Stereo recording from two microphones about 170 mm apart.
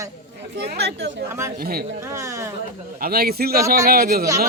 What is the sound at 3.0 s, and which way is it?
A man's voice, 65° right (ahead or behind).